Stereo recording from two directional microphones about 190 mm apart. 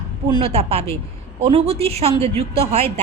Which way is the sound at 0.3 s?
30° right (ahead or behind).